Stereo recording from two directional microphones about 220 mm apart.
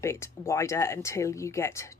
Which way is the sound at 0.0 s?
15° left (ahead or behind).